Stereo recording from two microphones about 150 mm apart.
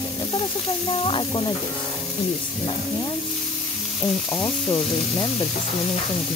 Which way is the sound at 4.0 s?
10° left (ahead or behind).